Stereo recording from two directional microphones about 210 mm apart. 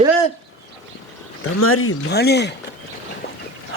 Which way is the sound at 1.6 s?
85° left.